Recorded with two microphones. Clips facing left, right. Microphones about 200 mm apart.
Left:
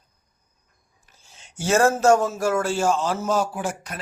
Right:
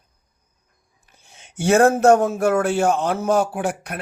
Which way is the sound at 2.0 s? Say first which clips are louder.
Right 3 dB; 60° right (ahead or behind).